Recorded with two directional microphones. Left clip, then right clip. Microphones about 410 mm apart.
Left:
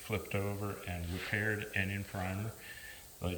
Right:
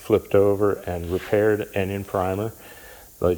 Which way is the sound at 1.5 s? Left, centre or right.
Centre.